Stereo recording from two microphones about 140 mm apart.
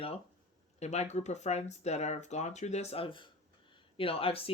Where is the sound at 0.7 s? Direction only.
50° left (ahead or behind).